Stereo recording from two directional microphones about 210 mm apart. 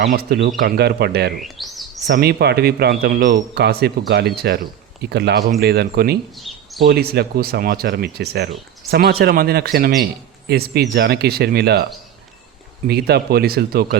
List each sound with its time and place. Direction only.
0.0 s speech: 45° right (ahead or behind)
1.4 s chirp: centre (ahead or behind)
2.0 s speech: 50° right (ahead or behind)
6.3 s a sound: centre (ahead or behind)
6.8 s speech: 50° right (ahead or behind)
12.9 s speech: 50° right (ahead or behind)